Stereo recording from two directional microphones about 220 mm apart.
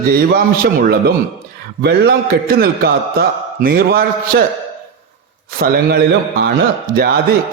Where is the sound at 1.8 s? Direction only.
45° right (ahead or behind).